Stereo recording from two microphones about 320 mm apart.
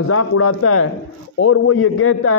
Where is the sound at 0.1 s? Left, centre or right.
Left.